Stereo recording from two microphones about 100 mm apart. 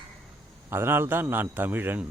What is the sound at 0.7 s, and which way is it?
A man's voice, 25° right (ahead or behind).